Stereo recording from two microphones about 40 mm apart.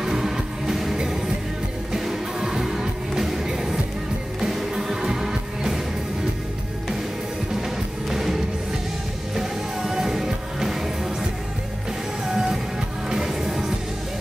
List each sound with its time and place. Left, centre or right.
0.0 s music: centre
1.9 s music: centre
8.1 s music: centre
12.3 s music: centre